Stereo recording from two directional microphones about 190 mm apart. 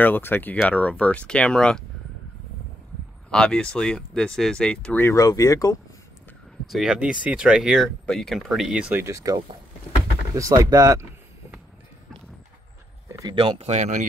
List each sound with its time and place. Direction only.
0.0 s speech: 10° left (ahead or behind)
3.3 s speech: 5° left (ahead or behind)
6.7 s speech: 5° right (ahead or behind)
13.1 s speech: 20° right (ahead or behind); by 14.0 s 35° right (ahead or behind)